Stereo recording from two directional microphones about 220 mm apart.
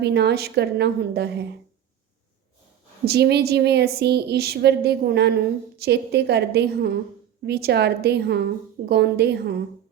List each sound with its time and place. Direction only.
0.0 s a woman's voice: 50° right (ahead or behind)
3.1 s a woman's voice: 50° right (ahead or behind)